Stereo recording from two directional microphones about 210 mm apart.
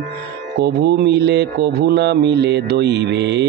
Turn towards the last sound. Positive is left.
turn(degrees=-55)  # may be behind; listen again after turning